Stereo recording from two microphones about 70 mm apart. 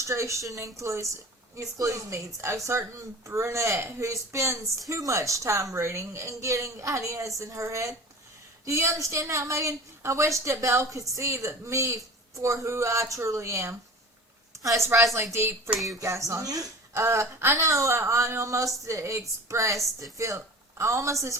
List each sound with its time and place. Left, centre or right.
0.0 s a woman's voice: right
16.9 s a woman's voice: right